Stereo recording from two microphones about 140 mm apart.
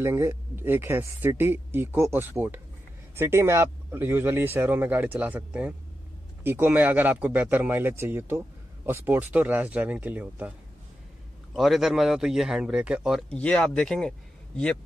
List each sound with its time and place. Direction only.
0.0 s speech: 20° right (ahead or behind)
11.5 s speech: centre (ahead or behind)
13.3 s speech: 5° left (ahead or behind)